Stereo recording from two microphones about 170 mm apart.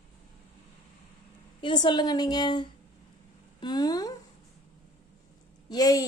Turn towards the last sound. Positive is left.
turn(degrees=20)  # may be behind; listen again after turning